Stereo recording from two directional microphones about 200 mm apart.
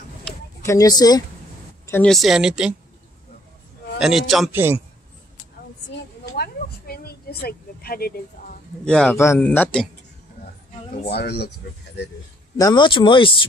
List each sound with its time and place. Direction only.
0.2 s a sound: 15° left (ahead or behind)
1.9 s a man's voice: 5° left (ahead or behind)
4.0 s a man's voice: centre (ahead or behind)
6.3 s speech: 50° left (ahead or behind)
8.8 s speech: 5° left (ahead or behind)
11.1 s speech: 55° left (ahead or behind)
12.5 s speech: 20° left (ahead or behind)